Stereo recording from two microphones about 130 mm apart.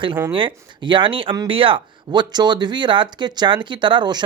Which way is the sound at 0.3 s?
40° right (ahead or behind).